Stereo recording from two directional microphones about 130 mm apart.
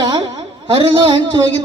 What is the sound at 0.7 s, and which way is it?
Speech, 45° right (ahead or behind).